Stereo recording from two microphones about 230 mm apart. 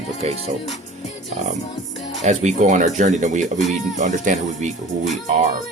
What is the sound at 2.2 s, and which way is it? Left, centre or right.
Speech, right.